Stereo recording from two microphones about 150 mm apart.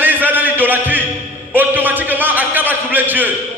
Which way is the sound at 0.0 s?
10° right (ahead or behind).